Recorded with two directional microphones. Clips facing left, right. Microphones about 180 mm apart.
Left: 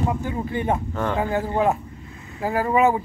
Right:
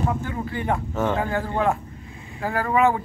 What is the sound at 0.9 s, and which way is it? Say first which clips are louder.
Speech: right 2 dB; 5° right (ahead or behind).